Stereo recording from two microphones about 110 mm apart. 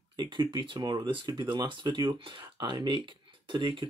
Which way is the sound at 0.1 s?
40° right (ahead or behind).